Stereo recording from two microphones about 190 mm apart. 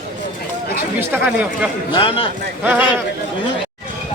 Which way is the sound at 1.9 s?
25° left (ahead or behind).